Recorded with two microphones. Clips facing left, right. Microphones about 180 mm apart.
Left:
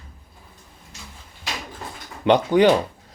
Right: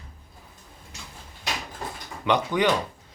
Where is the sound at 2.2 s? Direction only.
30° left (ahead or behind).